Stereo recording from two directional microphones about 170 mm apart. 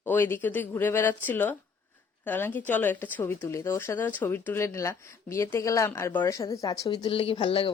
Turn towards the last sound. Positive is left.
turn(degrees=35)  # may be behind; listen again after turning